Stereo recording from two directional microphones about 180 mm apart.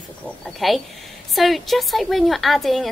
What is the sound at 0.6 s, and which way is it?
A woman's voice, centre (ahead or behind).